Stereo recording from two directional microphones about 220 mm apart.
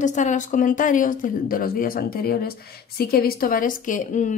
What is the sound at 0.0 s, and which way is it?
Speech, 35° left (ahead or behind).